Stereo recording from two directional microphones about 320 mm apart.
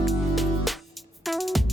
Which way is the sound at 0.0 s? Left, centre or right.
Centre.